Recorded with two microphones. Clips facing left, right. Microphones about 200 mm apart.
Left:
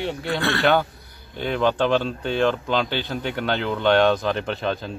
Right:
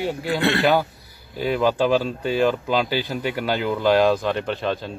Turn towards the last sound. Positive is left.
turn(degrees=0)  # may be behind; listen again after turning